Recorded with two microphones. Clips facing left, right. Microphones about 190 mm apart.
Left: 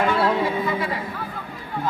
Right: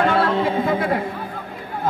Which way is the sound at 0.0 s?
60° right (ahead or behind).